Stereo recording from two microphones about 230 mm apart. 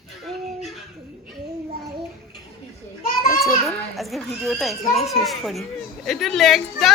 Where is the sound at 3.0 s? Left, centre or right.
Left.